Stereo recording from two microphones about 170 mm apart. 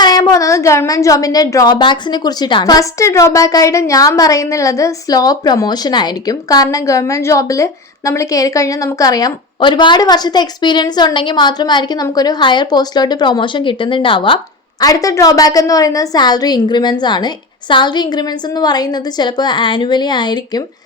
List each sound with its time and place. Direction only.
0.0 s a woman's voice: 20° left (ahead or behind)